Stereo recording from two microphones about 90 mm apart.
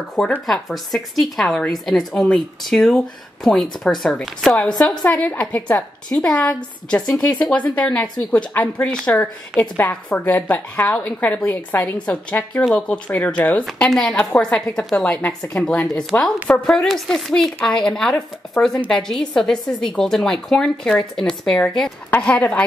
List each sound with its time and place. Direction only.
0.5 s a woman's voice: centre (ahead or behind); by 12.0 s 25° left (ahead or behind)
12.1 s a woman's voice: 15° left (ahead or behind)
13.7 s a woman's voice: 10° left (ahead or behind)
16.1 s a woman's voice: 25° left (ahead or behind)
16.4 s a woman's voice: 5° left (ahead or behind)
22.1 s a woman's voice: 15° left (ahead or behind)